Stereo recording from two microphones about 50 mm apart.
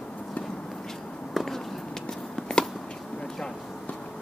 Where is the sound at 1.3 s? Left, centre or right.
Centre.